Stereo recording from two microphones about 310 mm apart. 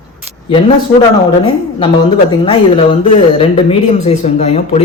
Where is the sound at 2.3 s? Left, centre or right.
Centre.